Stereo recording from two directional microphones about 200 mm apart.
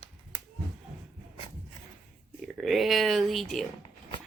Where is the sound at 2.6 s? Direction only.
Centre (ahead or behind).